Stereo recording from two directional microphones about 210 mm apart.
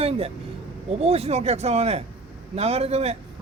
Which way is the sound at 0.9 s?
30° right (ahead or behind).